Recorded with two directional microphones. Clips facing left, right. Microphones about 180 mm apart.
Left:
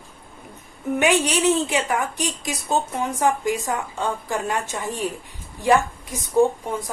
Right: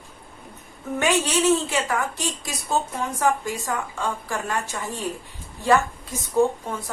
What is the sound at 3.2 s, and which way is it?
A woman's voice, 20° left (ahead or behind).